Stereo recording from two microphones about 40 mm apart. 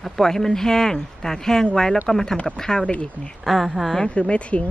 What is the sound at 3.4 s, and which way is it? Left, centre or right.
Speech, centre.